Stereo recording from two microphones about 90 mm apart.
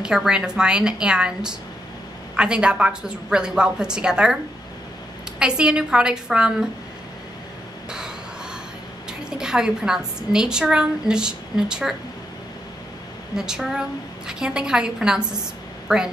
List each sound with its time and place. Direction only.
0.0 s a woman's voice: 5° right (ahead or behind)
5.4 s a woman's voice: 10° right (ahead or behind)
9.4 s a woman's voice: 5° right (ahead or behind)
13.4 s a woman's voice: 5° right (ahead or behind)